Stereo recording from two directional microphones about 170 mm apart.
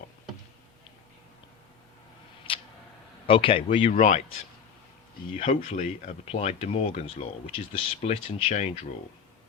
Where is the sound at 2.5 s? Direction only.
30° left (ahead or behind).